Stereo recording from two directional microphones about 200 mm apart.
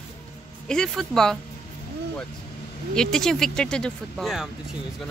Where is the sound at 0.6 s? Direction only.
5° left (ahead or behind).